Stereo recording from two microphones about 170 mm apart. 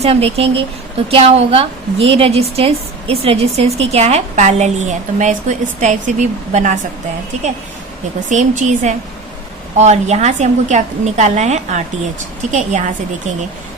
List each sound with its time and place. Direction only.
0.0 s a woman's voice: 35° right (ahead or behind)
8.3 s a woman's voice: 45° right (ahead or behind)